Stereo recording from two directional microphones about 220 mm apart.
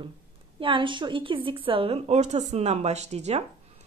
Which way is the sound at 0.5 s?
25° right (ahead or behind).